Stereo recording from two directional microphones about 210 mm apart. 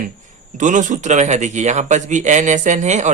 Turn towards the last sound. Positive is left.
turn(degrees=-35)  # may be behind; listen again after turning